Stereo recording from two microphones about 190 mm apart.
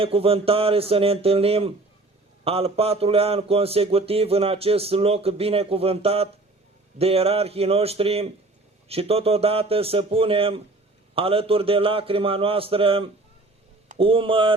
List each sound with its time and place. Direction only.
0.0 s speech: 30° right (ahead or behind)